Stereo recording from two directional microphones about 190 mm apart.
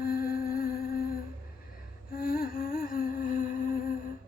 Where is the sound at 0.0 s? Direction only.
50° left (ahead or behind).